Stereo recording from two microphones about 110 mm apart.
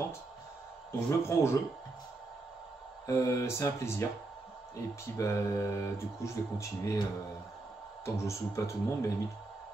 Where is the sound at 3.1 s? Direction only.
25° left (ahead or behind).